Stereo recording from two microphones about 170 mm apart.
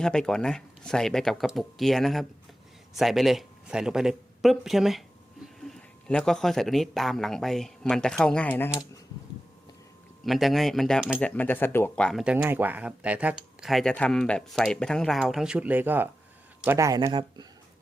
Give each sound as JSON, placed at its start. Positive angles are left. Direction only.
{"t": 0.0, "sound": "speech", "side_deg": 5}
{"t": 10.2, "sound": "speech", "side_deg": 0}
{"t": 11.2, "sound": "speech", "side_deg": 10}
{"t": 12.2, "sound": "speech", "side_deg": -10}